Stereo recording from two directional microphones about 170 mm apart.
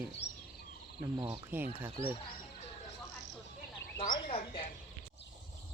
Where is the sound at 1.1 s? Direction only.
30° right (ahead or behind).